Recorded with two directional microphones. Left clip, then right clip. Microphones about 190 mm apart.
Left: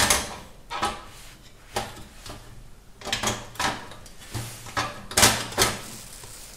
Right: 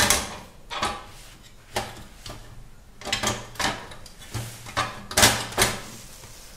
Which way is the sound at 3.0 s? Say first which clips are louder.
Right 1 dB; centre (ahead or behind).